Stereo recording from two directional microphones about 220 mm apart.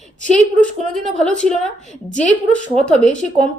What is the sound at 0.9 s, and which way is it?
A woman's voice, 5° left (ahead or behind).